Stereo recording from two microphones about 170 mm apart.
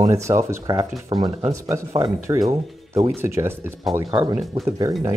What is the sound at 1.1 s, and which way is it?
Speech, 30° right (ahead or behind).